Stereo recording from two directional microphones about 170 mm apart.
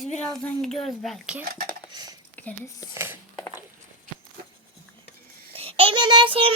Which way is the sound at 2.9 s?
15° right (ahead or behind).